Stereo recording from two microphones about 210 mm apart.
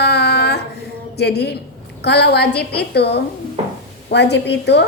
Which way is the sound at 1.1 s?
50° left (ahead or behind).